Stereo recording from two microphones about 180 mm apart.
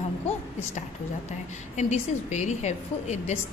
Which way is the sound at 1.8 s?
40° left (ahead or behind).